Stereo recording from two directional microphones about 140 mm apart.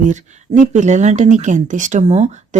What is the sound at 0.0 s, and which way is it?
Speech, 60° right (ahead or behind).